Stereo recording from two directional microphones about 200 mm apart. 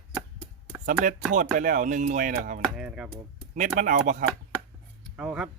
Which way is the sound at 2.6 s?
5° right (ahead or behind).